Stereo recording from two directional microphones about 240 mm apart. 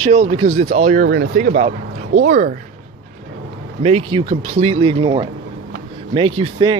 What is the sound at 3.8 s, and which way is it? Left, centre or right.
A man's voice, right.